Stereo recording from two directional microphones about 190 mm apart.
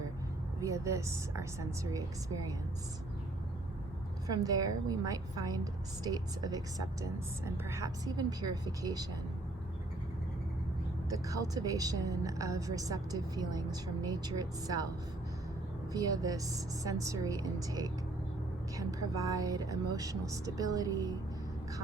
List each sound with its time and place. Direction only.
0.6 s speech: 15° right (ahead or behind)
4.3 s a woman's voice: 20° right (ahead or behind)
11.1 s a woman's voice: 20° right (ahead or behind)
15.9 s a woman's voice: 20° right (ahead or behind)